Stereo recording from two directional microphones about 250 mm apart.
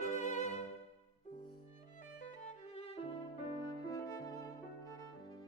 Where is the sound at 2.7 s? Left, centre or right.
Left.